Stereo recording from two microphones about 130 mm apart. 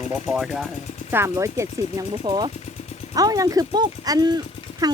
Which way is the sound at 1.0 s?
20° right (ahead or behind).